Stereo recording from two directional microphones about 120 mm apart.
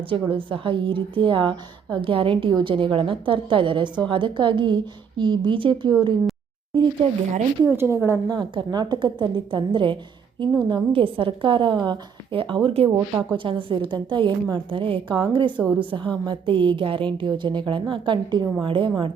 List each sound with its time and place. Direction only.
0.1 s a woman's voice: 45° right (ahead or behind)
7.6 s a woman's voice: 20° right (ahead or behind)
8.3 s a woman's voice: 35° right (ahead or behind)